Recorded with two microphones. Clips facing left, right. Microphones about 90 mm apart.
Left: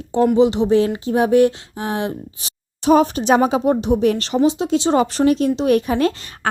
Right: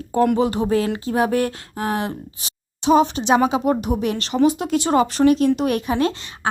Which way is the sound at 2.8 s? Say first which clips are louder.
Left 2 dB; 45° left (ahead or behind).